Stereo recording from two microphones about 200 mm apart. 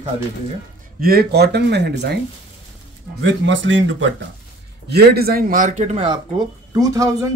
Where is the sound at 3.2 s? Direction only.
70° right (ahead or behind).